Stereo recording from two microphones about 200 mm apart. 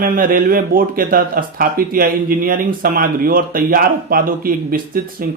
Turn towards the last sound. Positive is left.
turn(degrees=-45)  # may be behind; listen again after turning